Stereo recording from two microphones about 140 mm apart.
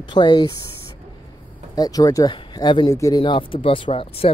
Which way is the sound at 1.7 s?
25° left (ahead or behind).